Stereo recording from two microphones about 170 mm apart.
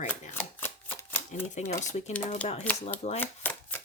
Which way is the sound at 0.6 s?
15° left (ahead or behind).